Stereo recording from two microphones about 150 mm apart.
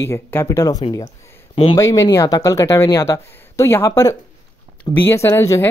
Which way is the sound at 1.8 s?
25° left (ahead or behind).